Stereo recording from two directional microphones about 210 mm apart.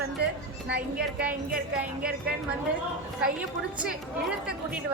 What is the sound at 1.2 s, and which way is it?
Speech, 5° right (ahead or behind).